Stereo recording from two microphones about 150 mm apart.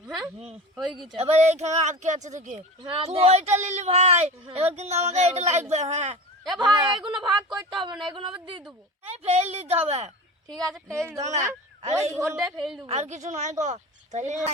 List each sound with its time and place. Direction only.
0.8 s speech: centre (ahead or behind)
1.2 s speech: 45° right (ahead or behind)
2.8 s speech: 40° right (ahead or behind)
6.6 s speech: 30° right (ahead or behind)
9.1 s speech: 45° right (ahead or behind)
10.8 s speech: 5° left (ahead or behind)
11.2 s speech: 50° right (ahead or behind)
12.2 s a man's voice: 20° right (ahead or behind)
12.5 s speech: centre (ahead or behind)
12.9 s speech: 50° right (ahead or behind)